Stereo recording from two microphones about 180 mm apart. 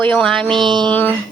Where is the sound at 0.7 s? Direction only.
25° right (ahead or behind).